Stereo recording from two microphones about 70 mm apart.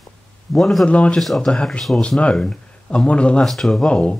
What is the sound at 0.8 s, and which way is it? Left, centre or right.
Speech, centre.